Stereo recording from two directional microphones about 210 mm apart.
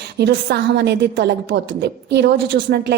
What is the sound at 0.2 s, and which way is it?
A woman's voice, 50° right (ahead or behind).